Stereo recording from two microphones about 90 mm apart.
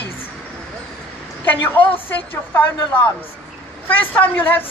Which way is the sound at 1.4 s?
20° left (ahead or behind).